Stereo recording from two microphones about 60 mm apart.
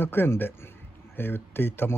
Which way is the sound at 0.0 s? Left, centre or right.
Left.